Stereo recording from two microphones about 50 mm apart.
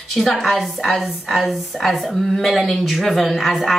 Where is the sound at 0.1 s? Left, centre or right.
Centre.